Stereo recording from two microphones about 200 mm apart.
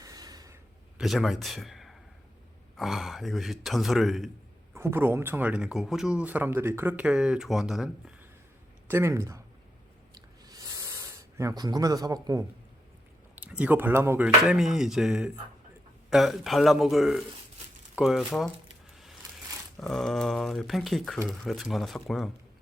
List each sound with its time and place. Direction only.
0.0 s a sound: 20° right (ahead or behind)
0.9 s a man's voice: centre (ahead or behind)
4.7 s speech: 15° right (ahead or behind)
10.2 s a sound: 20° right (ahead or behind)
13.3 s speech: 5° right (ahead or behind)
19.8 s speech: centre (ahead or behind)